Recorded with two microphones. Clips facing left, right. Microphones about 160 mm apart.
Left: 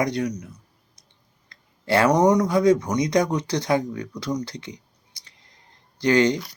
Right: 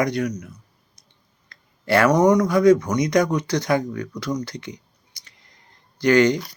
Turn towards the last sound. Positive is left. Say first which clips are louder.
# right 2 dB
turn(degrees=25)  # may be behind; listen again after turning